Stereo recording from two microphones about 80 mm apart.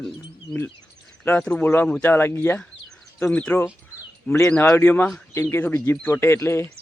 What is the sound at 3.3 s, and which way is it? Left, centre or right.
Speech, centre.